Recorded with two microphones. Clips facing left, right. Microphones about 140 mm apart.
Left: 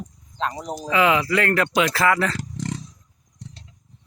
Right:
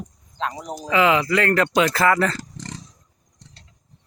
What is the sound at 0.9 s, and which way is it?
Speech, 25° right (ahead or behind).